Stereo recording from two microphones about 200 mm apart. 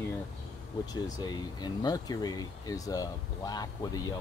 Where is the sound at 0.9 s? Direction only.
20° left (ahead or behind).